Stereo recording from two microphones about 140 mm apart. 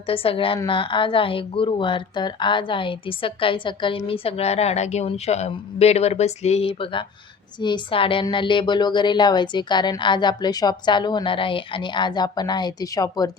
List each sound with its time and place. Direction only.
0.1 s speech: 40° left (ahead or behind)